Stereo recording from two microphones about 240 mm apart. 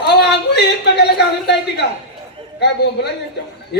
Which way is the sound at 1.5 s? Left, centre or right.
Left.